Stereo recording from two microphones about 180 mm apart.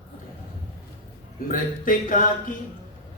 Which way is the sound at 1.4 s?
50° left (ahead or behind).